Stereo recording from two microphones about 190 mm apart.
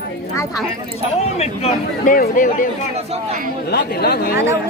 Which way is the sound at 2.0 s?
45° left (ahead or behind).